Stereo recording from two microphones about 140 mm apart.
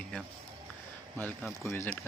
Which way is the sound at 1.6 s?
15° left (ahead or behind).